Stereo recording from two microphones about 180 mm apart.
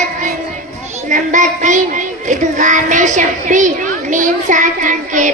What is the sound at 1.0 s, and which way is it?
Child singing, 45° right (ahead or behind).